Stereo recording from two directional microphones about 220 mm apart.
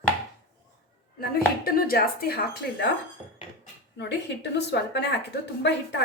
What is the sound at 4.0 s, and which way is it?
A woman's voice, 50° left (ahead or behind).